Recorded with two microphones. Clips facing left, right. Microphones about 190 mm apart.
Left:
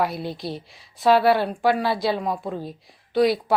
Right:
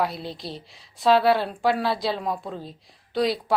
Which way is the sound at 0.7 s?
Centre (ahead or behind).